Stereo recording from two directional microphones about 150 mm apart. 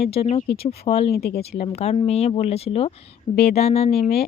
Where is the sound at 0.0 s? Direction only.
45° left (ahead or behind).